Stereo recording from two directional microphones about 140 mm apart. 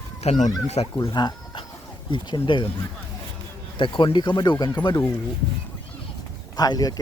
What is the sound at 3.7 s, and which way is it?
Speech, 35° left (ahead or behind).